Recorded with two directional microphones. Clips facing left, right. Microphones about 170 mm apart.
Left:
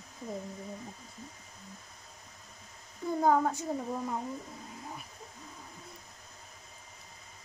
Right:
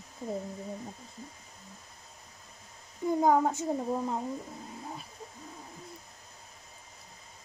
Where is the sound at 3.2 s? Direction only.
20° right (ahead or behind).